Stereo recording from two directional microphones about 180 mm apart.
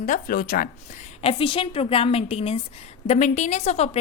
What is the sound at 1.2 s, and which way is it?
A woman's voice, 30° left (ahead or behind).